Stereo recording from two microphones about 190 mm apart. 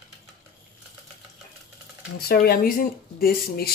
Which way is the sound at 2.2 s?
55° left (ahead or behind).